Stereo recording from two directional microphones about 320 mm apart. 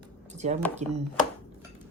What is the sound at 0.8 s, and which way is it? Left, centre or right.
Speech, right.